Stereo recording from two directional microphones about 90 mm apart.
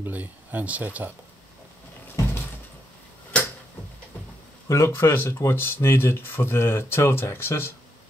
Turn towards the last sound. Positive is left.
turn(degrees=25)  # may be behind; listen again after turning